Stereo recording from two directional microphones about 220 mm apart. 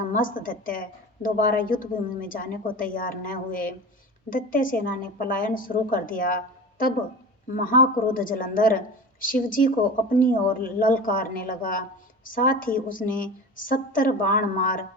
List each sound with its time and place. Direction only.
0.1 s a woman's voice: 40° left (ahead or behind)